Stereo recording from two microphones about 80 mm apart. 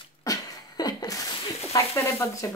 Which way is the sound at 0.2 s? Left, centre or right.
Left.